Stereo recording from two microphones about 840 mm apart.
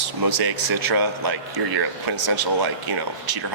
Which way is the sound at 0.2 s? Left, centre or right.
Right.